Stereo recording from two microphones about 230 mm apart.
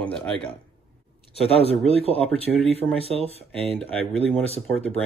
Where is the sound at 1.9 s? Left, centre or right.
Left.